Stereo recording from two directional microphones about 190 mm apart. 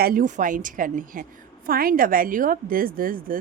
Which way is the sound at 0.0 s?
50° right (ahead or behind).